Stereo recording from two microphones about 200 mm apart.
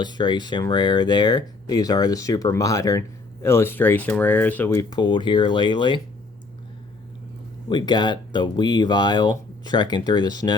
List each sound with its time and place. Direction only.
0.0 s speech: 20° left (ahead or behind)
7.7 s speech: 25° left (ahead or behind)